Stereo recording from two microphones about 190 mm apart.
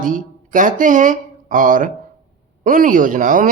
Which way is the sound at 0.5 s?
45° right (ahead or behind).